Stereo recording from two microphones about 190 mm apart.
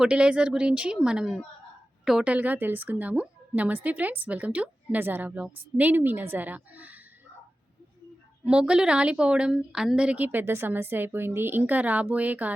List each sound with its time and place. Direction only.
0.0 s a woman's voice: 5° right (ahead or behind)
8.4 s a woman's voice: 5° right (ahead or behind)